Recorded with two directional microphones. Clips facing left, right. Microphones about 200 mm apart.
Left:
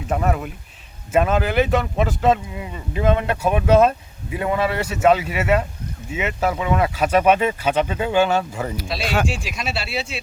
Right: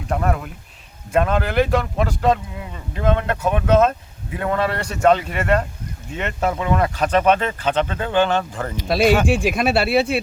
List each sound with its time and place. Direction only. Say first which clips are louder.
0.1 s speech: even; 5° left (ahead or behind)
9.2 s speech: right 8 dB; 55° right (ahead or behind)